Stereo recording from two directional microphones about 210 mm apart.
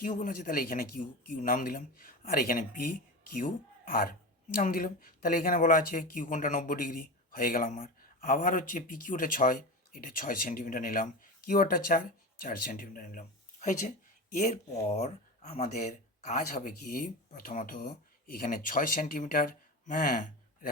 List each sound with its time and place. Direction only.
0.0 s speech: 40° left (ahead or behind)